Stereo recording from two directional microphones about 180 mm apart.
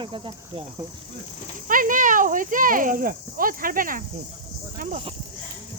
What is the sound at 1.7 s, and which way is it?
Speech, 50° right (ahead or behind).